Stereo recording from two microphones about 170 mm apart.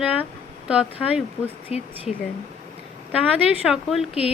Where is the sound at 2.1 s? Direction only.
40° left (ahead or behind).